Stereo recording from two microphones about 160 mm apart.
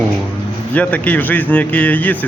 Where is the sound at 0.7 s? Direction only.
10° left (ahead or behind).